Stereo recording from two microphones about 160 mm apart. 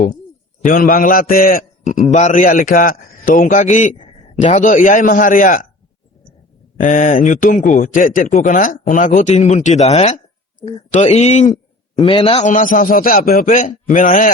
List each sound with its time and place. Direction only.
0.6 s a man's voice: 60° left (ahead or behind)
6.7 s speech: 55° left (ahead or behind)
11.9 s a man's voice: 35° left (ahead or behind); by 14.3 s 55° left (ahead or behind)